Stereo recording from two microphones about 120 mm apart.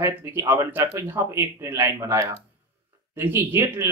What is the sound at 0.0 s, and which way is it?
Speech, 20° right (ahead or behind).